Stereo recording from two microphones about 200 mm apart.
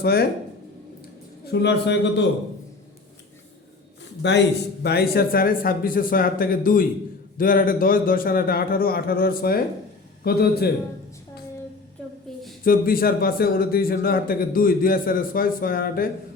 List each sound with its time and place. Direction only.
0.0 s a man's voice: 50° left (ahead or behind)
1.5 s a man's voice: 60° left (ahead or behind)
4.0 s a man's voice: 60° left (ahead or behind)
12.3 s a sound: centre (ahead or behind)
12.6 s a man's voice: 45° left (ahead or behind)